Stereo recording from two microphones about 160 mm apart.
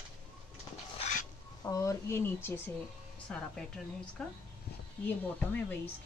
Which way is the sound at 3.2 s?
5° left (ahead or behind).